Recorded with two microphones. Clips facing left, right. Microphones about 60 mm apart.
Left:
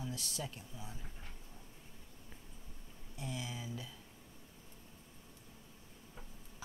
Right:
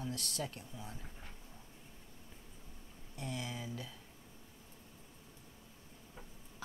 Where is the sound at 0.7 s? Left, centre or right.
Centre.